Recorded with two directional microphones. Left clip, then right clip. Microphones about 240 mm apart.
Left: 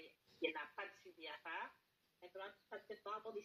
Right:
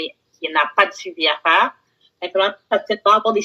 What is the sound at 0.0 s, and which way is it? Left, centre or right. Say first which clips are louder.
Speech: right 18 dB; right.